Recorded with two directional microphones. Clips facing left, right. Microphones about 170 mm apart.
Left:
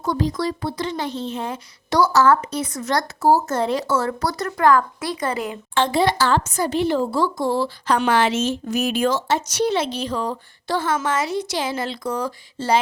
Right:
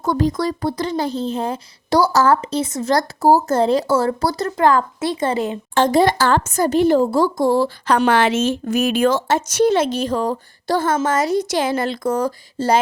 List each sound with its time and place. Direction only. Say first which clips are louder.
0.0 s speech: right 4 dB; 50° right (ahead or behind); by 5.5 s 25° right (ahead or behind)
5.7 s speech: right 4 dB; 45° right (ahead or behind)
8.0 s speech: right 3 dB; 55° right (ahead or behind)